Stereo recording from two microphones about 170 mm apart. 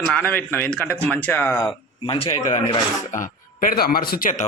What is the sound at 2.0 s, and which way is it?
Speech, 35° left (ahead or behind).